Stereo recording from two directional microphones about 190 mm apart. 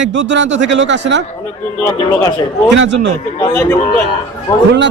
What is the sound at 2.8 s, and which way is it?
Speech, 65° right (ahead or behind).